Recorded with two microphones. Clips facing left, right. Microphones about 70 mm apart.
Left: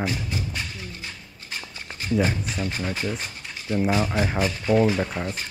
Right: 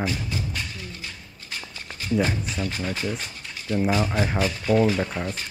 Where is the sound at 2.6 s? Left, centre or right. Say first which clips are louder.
Even; left.